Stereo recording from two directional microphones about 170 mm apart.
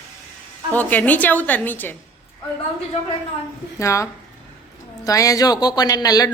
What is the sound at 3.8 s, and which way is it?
A woman's voice, 15° left (ahead or behind).